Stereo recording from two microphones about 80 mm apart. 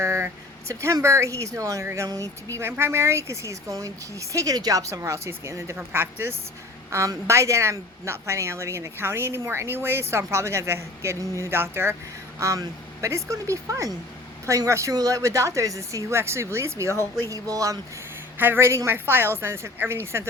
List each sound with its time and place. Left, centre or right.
0.0 s a sound: right
0.7 s a woman's voice: right
2.6 s a woman's voice: right
12.4 s a woman's voice: right
18.3 s a woman's voice: right